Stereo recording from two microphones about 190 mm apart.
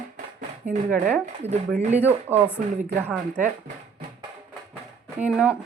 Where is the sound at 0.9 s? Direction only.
5° right (ahead or behind).